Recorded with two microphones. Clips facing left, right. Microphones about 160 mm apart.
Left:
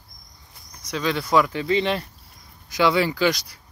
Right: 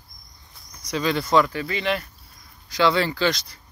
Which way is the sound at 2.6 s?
15° left (ahead or behind).